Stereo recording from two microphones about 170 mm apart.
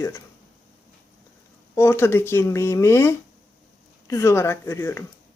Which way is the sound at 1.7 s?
15° left (ahead or behind).